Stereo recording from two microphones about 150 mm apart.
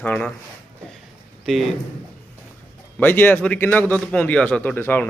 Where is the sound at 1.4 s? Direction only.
Centre (ahead or behind).